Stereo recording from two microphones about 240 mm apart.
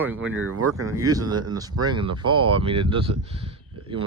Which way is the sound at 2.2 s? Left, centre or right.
Right.